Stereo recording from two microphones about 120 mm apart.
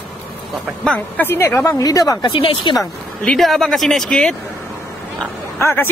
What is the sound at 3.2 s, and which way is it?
Speech, 5° left (ahead or behind).